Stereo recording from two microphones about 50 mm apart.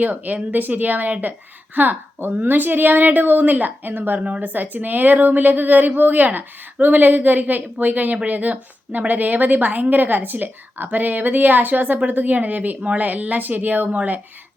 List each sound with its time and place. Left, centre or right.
0.0 s speech: right
4.2 s speech: right